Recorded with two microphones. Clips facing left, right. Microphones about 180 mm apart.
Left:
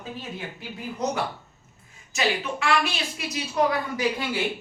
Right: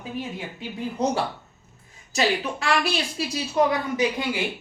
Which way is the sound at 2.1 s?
35° right (ahead or behind).